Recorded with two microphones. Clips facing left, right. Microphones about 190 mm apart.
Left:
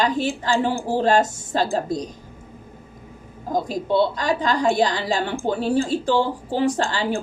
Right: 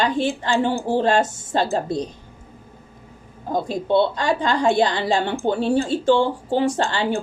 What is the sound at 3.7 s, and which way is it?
Speech, 25° right (ahead or behind).